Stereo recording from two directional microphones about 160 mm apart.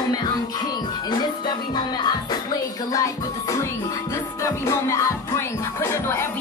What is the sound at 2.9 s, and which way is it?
Music, 20° left (ahead or behind).